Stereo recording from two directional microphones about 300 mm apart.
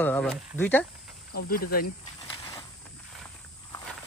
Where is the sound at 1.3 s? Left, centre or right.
Left.